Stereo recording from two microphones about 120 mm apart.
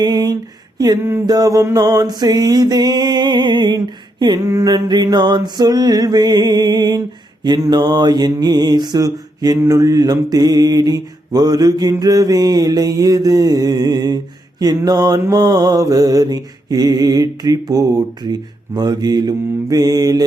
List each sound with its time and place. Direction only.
0.0 s a sound: 35° right (ahead or behind)
1.3 s mantra: 30° right (ahead or behind)
4.4 s mantra: 30° right (ahead or behind)